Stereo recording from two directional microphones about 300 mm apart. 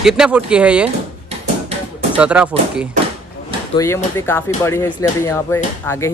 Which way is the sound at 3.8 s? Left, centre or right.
Centre.